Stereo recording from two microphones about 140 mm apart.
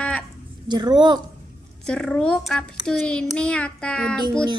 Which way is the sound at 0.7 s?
30° right (ahead or behind).